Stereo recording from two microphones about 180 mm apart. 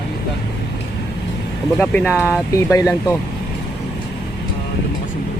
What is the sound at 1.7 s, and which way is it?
Speech, 10° left (ahead or behind).